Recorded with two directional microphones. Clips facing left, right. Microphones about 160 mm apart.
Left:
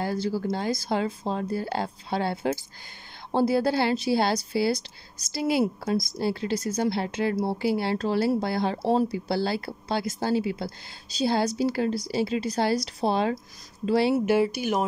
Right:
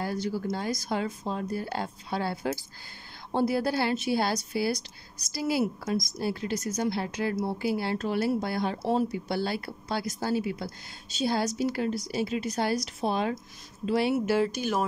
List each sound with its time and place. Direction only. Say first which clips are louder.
0.0 s a woman's voice: left 3 dB; 30° left (ahead or behind)
14.2 s speech: left 3 dB; 10° left (ahead or behind)